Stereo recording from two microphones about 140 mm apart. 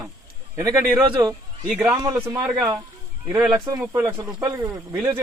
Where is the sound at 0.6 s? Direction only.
20° right (ahead or behind).